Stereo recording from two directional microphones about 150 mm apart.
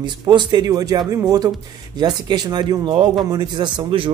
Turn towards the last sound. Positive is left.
turn(degrees=-35)  # may be behind; listen again after turning